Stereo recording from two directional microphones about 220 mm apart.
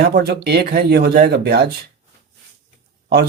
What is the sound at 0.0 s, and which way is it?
Speech, 45° right (ahead or behind).